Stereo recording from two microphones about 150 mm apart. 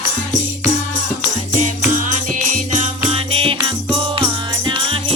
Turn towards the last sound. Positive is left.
turn(degrees=-35)  # may be behind; listen again after turning